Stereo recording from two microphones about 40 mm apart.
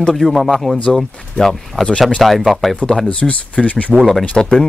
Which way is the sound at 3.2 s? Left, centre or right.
Left.